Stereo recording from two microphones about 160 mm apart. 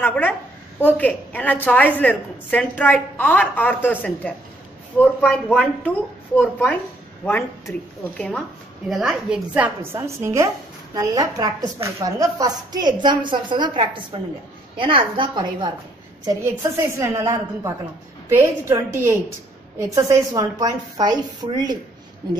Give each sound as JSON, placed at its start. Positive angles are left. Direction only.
{"t": 0.0, "sound": "a woman's voice", "side_deg": 10}
{"t": 9.9, "sound": "a woman's voice", "side_deg": -20}
{"t": 16.3, "sound": "a woman's voice", "side_deg": -15}